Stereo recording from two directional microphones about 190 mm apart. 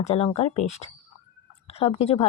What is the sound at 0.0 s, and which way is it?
A woman's voice, 30° left (ahead or behind).